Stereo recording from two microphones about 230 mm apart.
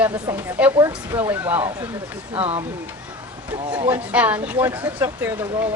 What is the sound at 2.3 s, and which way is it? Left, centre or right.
Speech, right.